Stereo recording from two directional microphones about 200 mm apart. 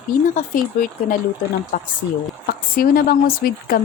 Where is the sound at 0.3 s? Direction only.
45° left (ahead or behind).